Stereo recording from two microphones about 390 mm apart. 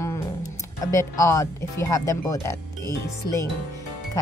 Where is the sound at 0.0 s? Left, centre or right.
Centre.